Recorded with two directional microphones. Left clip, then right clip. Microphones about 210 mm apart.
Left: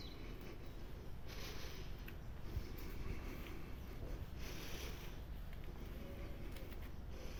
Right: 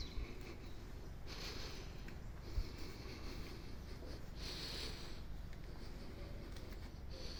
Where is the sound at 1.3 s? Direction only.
5° right (ahead or behind).